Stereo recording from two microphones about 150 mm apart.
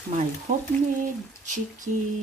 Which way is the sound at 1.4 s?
55° right (ahead or behind).